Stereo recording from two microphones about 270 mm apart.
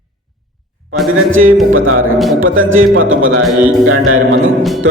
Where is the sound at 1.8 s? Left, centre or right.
Right.